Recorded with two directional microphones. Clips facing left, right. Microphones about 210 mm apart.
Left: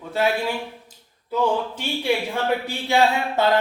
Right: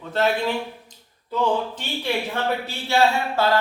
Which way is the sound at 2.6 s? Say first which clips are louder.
Right 1 dB; 20° left (ahead or behind).